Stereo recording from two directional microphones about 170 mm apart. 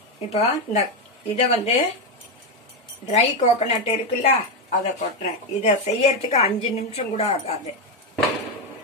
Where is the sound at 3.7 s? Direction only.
40° left (ahead or behind).